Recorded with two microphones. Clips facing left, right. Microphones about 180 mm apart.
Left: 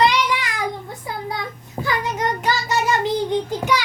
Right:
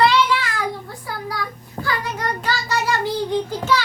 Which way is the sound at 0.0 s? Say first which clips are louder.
Right 2 dB; 15° left (ahead or behind).